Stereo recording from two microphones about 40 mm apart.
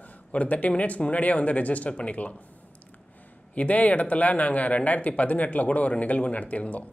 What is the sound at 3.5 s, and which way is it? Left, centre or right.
Speech, left.